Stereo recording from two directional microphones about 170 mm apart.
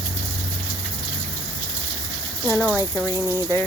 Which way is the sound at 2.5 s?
10° left (ahead or behind).